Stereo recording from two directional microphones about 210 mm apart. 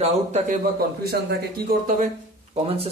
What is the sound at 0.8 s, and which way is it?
Speech, 45° right (ahead or behind).